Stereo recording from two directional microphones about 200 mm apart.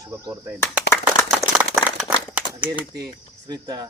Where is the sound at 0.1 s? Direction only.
15° right (ahead or behind).